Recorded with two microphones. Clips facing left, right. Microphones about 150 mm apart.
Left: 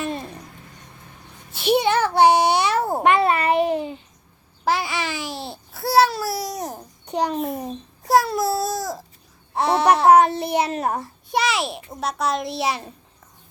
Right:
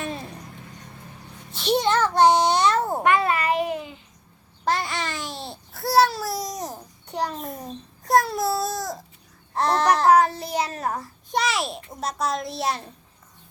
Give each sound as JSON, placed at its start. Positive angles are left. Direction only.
{"t": 0.0, "sound": "a sound", "side_deg": 0}
{"t": 1.9, "sound": "babbling", "side_deg": 10}
{"t": 3.0, "sound": "babbling", "side_deg": 20}
{"t": 4.6, "sound": "babbling", "side_deg": 5}
{"t": 6.7, "sound": "babbling", "side_deg": 20}
{"t": 7.5, "sound": "speech", "side_deg": 5}
{"t": 9.6, "sound": "babbling", "side_deg": 10}
{"t": 10.1, "sound": "child singing", "side_deg": 25}
{"t": 11.3, "sound": "a child's voice", "side_deg": 0}